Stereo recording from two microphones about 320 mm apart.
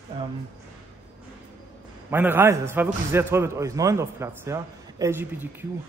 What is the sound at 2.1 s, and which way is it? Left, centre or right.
A man's voice, centre.